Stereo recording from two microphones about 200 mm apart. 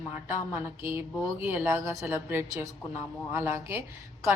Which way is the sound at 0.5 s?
10° right (ahead or behind).